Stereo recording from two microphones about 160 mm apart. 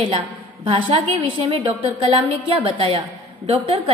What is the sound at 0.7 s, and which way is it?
A woman's voice, 35° right (ahead or behind).